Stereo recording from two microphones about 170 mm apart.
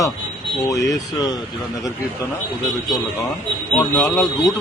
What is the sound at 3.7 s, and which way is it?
Speech, 10° left (ahead or behind).